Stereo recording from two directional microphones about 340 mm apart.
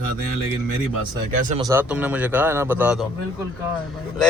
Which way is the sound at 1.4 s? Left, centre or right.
Right.